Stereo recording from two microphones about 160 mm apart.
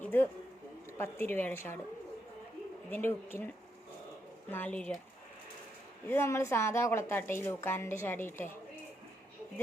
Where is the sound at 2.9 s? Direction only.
15° left (ahead or behind).